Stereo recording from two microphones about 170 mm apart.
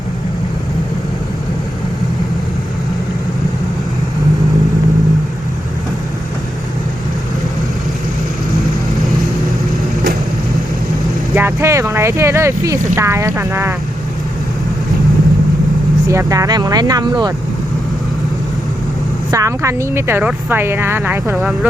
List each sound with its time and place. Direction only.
11.3 s speech: 15° right (ahead or behind)
16.0 s speech: 20° right (ahead or behind)
19.3 s speech: 20° right (ahead or behind)